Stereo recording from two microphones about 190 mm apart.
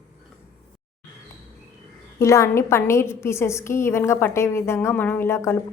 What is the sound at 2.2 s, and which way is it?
A woman's voice, 15° left (ahead or behind).